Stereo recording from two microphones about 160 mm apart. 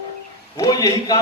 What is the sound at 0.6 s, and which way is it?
Speech, 20° left (ahead or behind).